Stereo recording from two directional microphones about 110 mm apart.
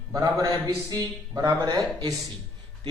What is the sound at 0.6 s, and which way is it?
A man's voice, 30° right (ahead or behind).